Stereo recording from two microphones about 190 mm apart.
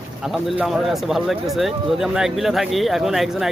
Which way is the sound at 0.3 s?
Centre (ahead or behind).